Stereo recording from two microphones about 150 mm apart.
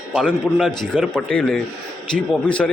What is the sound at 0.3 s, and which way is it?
A man's voice, 5° left (ahead or behind).